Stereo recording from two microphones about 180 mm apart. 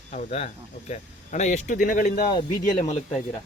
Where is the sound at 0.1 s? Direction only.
35° left (ahead or behind).